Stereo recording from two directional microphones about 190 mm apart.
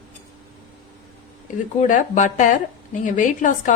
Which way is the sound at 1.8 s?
40° left (ahead or behind).